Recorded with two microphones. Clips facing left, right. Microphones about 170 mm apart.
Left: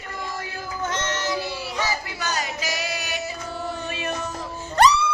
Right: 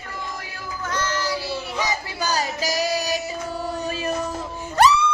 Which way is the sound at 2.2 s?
35° right (ahead or behind).